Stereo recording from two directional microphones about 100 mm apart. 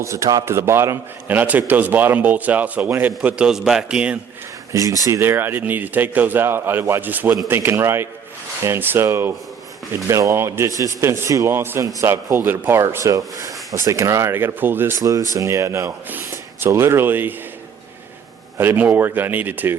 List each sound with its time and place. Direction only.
0.0 s a man's voice: 30° right (ahead or behind); by 4.2 s 10° right (ahead or behind)
4.7 s speech: 35° right (ahead or behind)
18.5 s speech: 25° right (ahead or behind)